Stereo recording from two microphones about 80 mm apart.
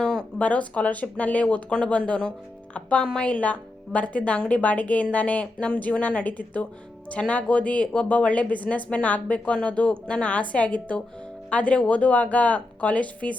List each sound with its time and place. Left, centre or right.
0.0 s speech: centre